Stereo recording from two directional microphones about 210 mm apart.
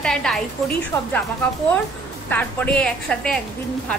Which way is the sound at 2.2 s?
5° left (ahead or behind).